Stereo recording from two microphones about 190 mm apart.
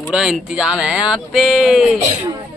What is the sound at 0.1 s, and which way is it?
Speech, 5° right (ahead or behind).